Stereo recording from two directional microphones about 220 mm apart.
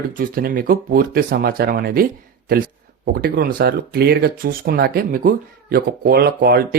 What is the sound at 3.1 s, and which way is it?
Speech, 45° right (ahead or behind).